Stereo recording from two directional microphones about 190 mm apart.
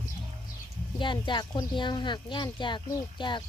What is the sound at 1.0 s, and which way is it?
Speech, 25° left (ahead or behind).